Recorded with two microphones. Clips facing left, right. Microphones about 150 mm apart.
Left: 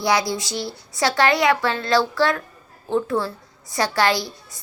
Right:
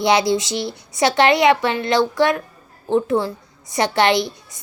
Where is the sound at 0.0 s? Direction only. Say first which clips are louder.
Right 5 dB; 25° right (ahead or behind).